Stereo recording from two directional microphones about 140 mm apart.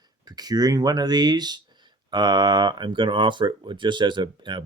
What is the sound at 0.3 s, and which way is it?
Speech, 30° right (ahead or behind).